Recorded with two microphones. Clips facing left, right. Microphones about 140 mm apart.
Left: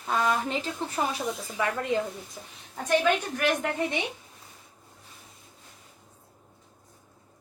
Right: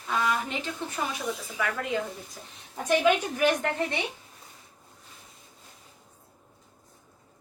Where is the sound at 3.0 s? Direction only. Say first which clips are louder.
Right 2 dB; 15° right (ahead or behind).